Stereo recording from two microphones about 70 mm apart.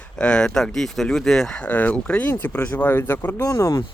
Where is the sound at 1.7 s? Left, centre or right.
Left.